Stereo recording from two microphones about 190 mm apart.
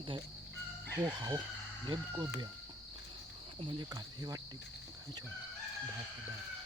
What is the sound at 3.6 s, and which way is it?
Cricket, 25° right (ahead or behind).